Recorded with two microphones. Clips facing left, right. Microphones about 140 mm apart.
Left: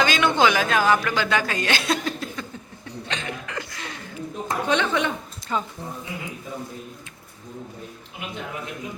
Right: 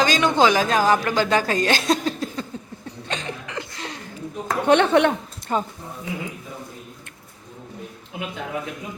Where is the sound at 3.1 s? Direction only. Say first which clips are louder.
Right 2 dB; 40° right (ahead or behind).